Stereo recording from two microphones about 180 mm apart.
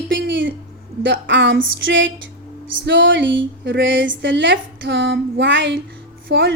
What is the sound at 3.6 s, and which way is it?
A woman's voice, 80° right.